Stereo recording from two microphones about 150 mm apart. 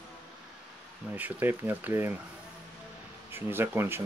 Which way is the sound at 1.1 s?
10° right (ahead or behind).